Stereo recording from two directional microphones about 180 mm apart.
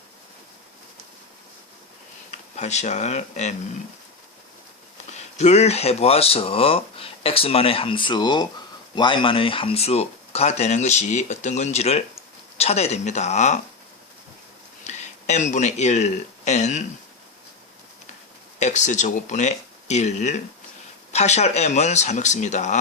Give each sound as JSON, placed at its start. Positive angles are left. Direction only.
{"t": 2.3, "sound": "speech", "side_deg": 40}
{"t": 5.1, "sound": "speech", "side_deg": 40}
{"t": 14.8, "sound": "speech", "side_deg": 40}
{"t": 18.6, "sound": "speech", "side_deg": 40}